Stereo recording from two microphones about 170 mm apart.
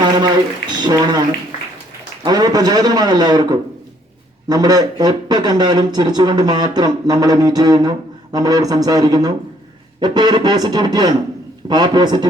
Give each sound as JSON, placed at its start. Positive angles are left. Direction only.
{"t": 0.0, "sound": "speech", "side_deg": -25}
{"t": 2.2, "sound": "speech", "side_deg": -25}